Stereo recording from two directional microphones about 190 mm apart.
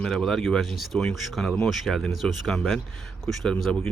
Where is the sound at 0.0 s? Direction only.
5° left (ahead or behind).